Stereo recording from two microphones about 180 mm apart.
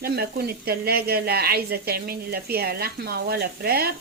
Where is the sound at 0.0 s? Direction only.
60° right (ahead or behind).